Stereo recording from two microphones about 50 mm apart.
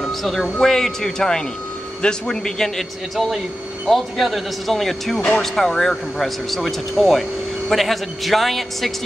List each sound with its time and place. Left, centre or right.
0.2 s speech: centre
3.8 s speech: centre